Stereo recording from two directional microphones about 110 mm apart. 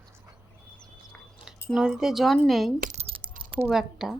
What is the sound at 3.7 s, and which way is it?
Speech, 5° right (ahead or behind).